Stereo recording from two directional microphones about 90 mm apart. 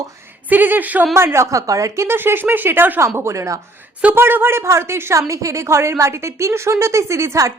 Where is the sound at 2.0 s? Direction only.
25° right (ahead or behind).